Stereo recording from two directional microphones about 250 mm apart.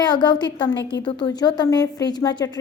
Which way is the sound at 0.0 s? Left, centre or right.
Centre.